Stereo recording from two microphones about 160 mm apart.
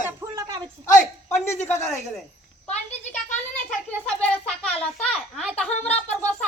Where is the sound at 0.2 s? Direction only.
20° right (ahead or behind).